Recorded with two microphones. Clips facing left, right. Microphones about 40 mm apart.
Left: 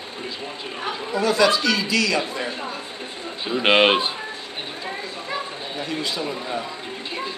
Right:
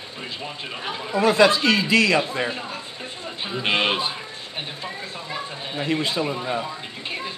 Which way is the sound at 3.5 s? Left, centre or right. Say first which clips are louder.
Left 6 dB; left.